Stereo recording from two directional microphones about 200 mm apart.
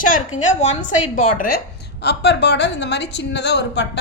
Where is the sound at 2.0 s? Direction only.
60° left (ahead or behind).